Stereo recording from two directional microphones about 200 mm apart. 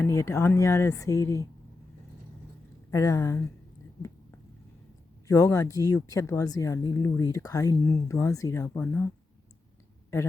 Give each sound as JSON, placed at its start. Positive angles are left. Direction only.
{"t": 0.0, "sound": "speech", "side_deg": 15}
{"t": 2.9, "sound": "speech", "side_deg": 15}
{"t": 5.3, "sound": "speech", "side_deg": 15}